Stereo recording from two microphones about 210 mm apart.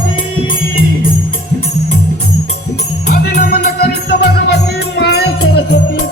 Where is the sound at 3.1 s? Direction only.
50° left (ahead or behind).